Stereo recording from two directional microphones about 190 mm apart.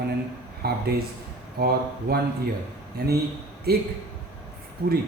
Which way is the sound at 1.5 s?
55° right (ahead or behind).